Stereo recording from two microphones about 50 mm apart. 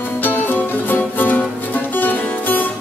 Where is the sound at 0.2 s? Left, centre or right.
Left.